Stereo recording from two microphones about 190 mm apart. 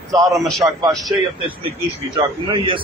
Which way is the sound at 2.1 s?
25° right (ahead or behind).